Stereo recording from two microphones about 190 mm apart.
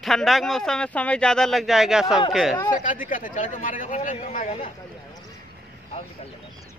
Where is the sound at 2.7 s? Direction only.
45° left (ahead or behind).